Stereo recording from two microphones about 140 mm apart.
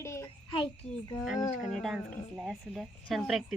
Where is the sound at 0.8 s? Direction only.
55° left (ahead or behind).